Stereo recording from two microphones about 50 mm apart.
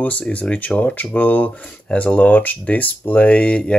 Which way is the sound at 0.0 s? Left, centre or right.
Left.